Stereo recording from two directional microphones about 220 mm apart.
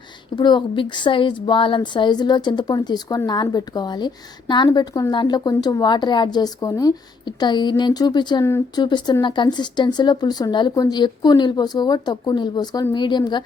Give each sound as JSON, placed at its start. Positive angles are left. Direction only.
{"t": 0.3, "sound": "a woman's voice", "side_deg": 20}